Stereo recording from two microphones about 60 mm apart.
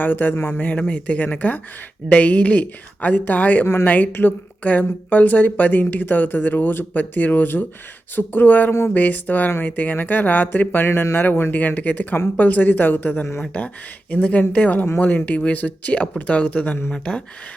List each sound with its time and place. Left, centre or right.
0.0 s speech: left
14.1 s speech: left